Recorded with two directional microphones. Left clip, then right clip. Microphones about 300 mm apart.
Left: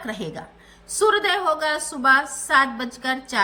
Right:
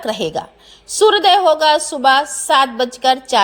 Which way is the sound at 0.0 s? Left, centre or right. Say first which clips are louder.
Right 11 dB; right.